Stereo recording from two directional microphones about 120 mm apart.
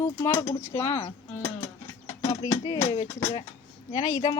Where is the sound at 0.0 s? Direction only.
30° left (ahead or behind).